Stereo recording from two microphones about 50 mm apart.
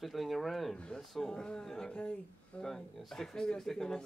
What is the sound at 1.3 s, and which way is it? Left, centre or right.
Speech, centre.